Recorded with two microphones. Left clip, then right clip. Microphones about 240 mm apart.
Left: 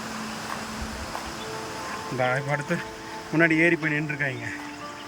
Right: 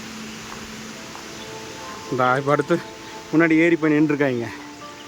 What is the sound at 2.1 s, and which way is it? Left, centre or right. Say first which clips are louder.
A man's voice: right 7 dB; centre.